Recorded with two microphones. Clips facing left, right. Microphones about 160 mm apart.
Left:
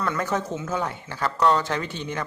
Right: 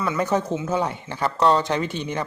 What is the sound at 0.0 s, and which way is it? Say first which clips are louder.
Speech: right 3 dB; 10° right (ahead or behind).